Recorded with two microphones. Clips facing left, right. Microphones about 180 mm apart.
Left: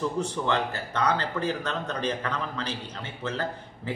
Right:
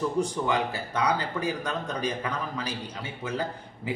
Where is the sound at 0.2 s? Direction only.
10° right (ahead or behind).